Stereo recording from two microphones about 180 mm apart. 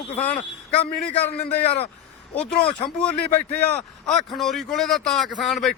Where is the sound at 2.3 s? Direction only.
5° left (ahead or behind).